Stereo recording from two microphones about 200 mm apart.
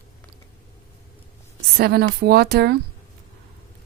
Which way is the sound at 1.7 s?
50° right (ahead or behind).